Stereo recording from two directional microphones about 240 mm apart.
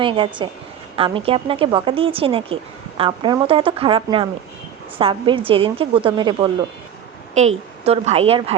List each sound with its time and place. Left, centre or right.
0.0 s a woman's voice: right